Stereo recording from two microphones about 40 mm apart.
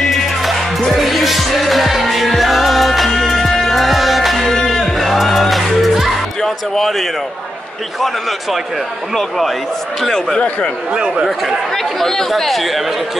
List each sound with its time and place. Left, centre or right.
0.4 s music: centre
6.4 s speech: centre
10.0 s speech: centre
10.9 s speech: right
11.2 s speech: centre